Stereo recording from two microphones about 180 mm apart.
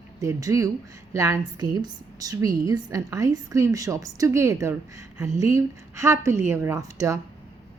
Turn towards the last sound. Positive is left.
turn(degrees=-15)  # may be behind; listen again after turning